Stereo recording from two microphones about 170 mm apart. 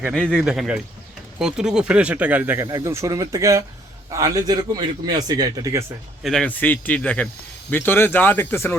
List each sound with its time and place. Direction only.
0.1 s a man's voice: centre (ahead or behind); by 5.8 s 20° right (ahead or behind)
6.2 s speech: 5° left (ahead or behind)